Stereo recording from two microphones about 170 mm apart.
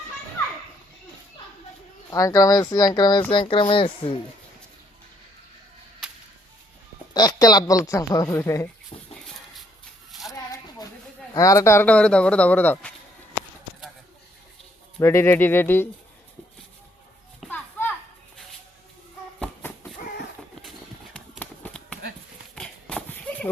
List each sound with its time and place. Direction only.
2.0 s speech: 20° left (ahead or behind)
6.0 s whip: 5° right (ahead or behind)
7.1 s speech: 25° left (ahead or behind)
8.9 s a sound: 35° left (ahead or behind)
10.1 s a sound: centre (ahead or behind)
11.3 s speech: 20° left (ahead or behind)
14.9 s speech: 15° left (ahead or behind)
17.5 s children playing: 10° left (ahead or behind)
21.3 s a sound: 10° left (ahead or behind)